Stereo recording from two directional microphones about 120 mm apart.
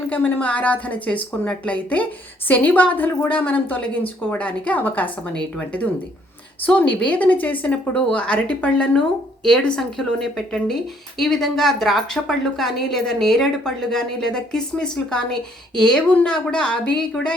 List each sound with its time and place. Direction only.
0.1 s a woman's voice: 10° left (ahead or behind)